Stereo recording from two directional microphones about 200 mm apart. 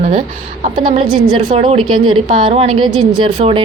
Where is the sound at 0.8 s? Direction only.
25° right (ahead or behind).